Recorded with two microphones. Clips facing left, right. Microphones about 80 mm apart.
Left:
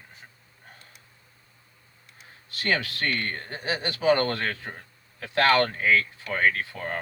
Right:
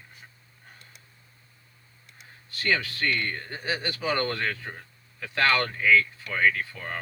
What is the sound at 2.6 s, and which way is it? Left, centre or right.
Speech, left.